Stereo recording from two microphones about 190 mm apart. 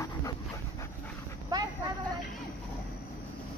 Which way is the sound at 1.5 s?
20° right (ahead or behind).